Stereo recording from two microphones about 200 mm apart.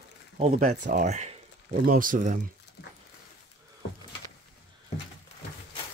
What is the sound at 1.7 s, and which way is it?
Speech, 45° right (ahead or behind).